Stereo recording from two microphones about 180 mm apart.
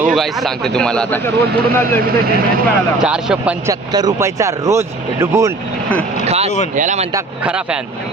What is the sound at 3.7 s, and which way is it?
Speech, 20° right (ahead or behind).